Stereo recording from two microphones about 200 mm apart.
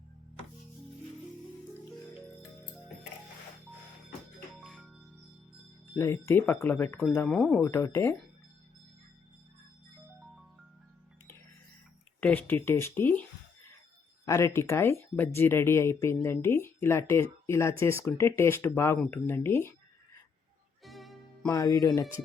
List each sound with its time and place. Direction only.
4.6 s music: centre (ahead or behind)
5.9 s speech: 15° left (ahead or behind)
12.2 s speech: 10° left (ahead or behind)
14.3 s speech: 15° left (ahead or behind)
20.8 s music: centre (ahead or behind)
21.5 s speech: 15° left (ahead or behind)